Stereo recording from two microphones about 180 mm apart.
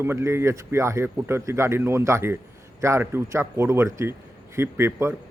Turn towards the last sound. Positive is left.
turn(degrees=-15)  # may be behind; listen again after turning